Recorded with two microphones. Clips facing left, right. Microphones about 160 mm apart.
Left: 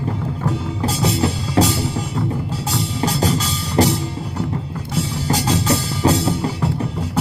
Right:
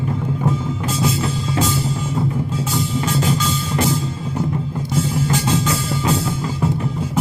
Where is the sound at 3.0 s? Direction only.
35° left (ahead or behind).